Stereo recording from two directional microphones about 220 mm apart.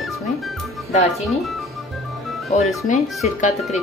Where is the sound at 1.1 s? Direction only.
Centre (ahead or behind).